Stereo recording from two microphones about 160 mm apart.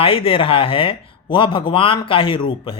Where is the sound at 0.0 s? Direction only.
35° left (ahead or behind).